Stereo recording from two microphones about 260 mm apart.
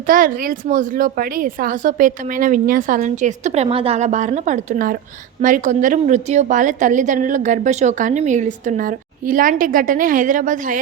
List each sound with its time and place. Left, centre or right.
0.1 s a woman's voice: right